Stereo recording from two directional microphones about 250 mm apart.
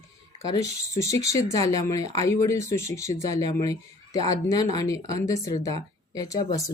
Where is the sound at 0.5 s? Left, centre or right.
Centre.